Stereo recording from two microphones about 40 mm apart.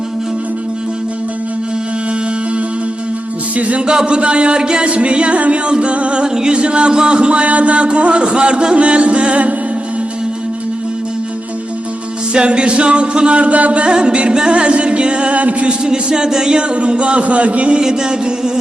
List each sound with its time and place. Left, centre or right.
3.5 s music: right
3.8 s music: right
12.3 s music: right
13.8 s music: right
15.8 s music: centre
17.7 s music: centre